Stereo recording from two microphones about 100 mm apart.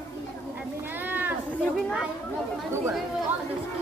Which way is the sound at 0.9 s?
20° right (ahead or behind).